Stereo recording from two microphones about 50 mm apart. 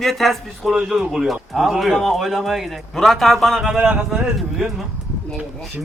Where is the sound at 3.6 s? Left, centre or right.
Centre.